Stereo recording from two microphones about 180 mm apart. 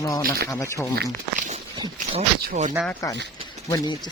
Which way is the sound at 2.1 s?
40° right (ahead or behind).